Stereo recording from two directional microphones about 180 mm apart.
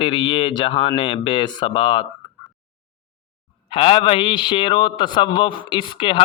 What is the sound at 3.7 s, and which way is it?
A man's voice, 30° left (ahead or behind).